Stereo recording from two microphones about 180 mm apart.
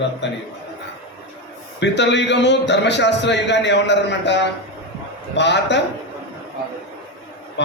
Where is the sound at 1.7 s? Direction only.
75° left (ahead or behind).